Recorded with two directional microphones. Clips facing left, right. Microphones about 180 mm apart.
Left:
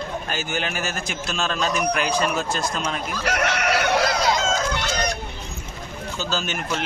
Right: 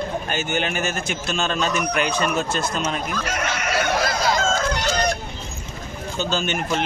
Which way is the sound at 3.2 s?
70° left (ahead or behind).